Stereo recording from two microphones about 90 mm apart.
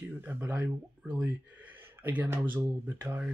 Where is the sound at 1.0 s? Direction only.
15° right (ahead or behind).